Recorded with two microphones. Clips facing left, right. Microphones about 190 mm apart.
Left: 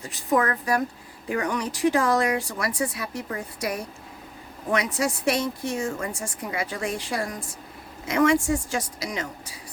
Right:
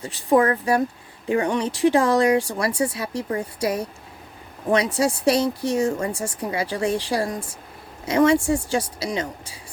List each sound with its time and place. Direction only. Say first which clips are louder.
0.0 s speech: right 5 dB; 30° right (ahead or behind)